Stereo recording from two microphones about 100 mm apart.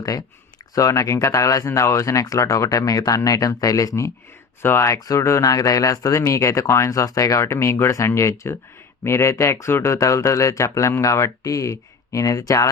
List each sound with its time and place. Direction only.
0.0 s speech: 35° left (ahead or behind)